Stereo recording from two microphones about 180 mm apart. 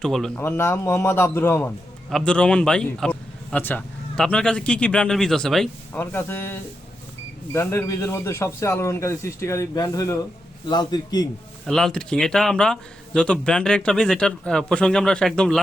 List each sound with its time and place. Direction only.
0.0 s speech: 5° left (ahead or behind)
6.0 s a man's voice: 15° left (ahead or behind)
11.6 s speech: centre (ahead or behind)